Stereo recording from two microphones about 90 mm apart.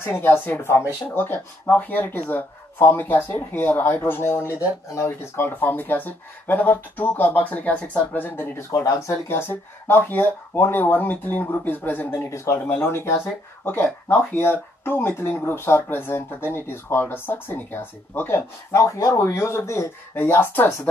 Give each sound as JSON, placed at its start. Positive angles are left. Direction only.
{"t": 0.2, "sound": "speech", "side_deg": 25}
{"t": 18.7, "sound": "speech", "side_deg": 35}